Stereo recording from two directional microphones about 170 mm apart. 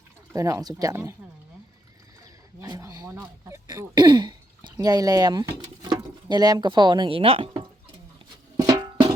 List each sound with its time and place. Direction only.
0.3 s speech: 20° right (ahead or behind)
2.6 s speech: 20° right (ahead or behind); by 7.5 s 35° right (ahead or behind)
8.5 s music: 20° right (ahead or behind)